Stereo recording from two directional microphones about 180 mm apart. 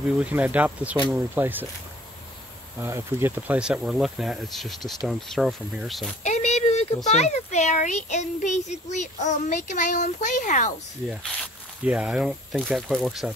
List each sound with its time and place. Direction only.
0.2 s speech: 10° right (ahead or behind)
2.8 s speech: 15° right (ahead or behind)
6.2 s a sound: 40° left (ahead or behind)
7.1 s a child's voice: 40° left (ahead or behind)
11.8 s speech: 5° right (ahead or behind)